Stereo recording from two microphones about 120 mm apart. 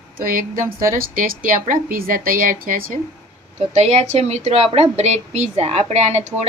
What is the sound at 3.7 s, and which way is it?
A woman's voice, 65° right (ahead or behind).